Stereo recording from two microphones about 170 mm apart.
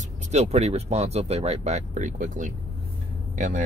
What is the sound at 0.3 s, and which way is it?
Speech, 40° right (ahead or behind).